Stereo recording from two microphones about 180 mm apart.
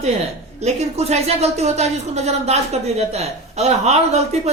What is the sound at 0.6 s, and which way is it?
Speech, 35° right (ahead or behind).